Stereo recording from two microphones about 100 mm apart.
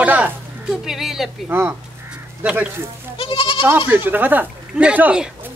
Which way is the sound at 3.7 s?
20° right (ahead or behind).